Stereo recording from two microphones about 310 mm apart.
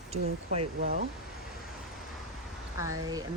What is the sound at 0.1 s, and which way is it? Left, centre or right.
Speech, right.